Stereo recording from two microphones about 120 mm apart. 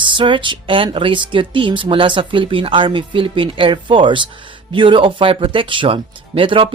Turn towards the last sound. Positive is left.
turn(degrees=-45)  # may be behind; listen again after turning